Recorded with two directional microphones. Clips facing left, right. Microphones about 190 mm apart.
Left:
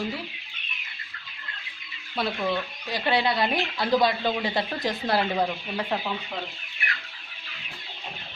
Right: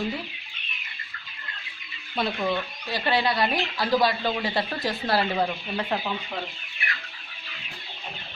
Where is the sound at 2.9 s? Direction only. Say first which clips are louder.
Even; 20° left (ahead or behind).